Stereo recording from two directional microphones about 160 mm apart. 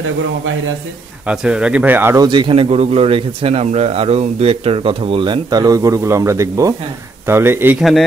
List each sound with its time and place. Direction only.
1.2 s speech: 5° right (ahead or behind)
2.2 s a man's voice: 30° right (ahead or behind)